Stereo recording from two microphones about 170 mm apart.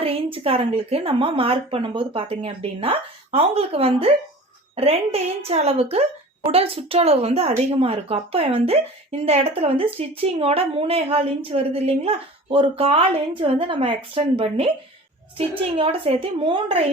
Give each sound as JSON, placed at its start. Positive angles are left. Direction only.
{"t": 0.0, "sound": "a woman's voice", "side_deg": -35}